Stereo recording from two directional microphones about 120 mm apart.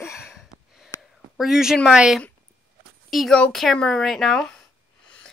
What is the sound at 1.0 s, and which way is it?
Speech, centre (ahead or behind).